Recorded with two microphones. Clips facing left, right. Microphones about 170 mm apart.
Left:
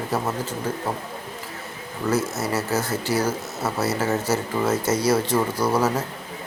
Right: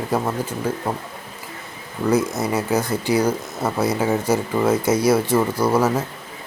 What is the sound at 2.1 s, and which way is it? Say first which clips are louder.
Speech: right 4 dB; 15° right (ahead or behind).